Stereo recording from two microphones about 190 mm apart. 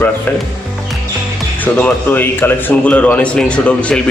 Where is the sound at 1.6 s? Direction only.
10° left (ahead or behind).